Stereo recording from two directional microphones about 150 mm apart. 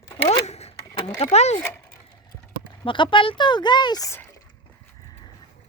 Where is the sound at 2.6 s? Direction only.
35° left (ahead or behind).